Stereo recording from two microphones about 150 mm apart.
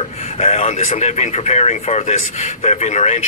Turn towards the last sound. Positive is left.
turn(degrees=50)  # may be behind; listen again after turning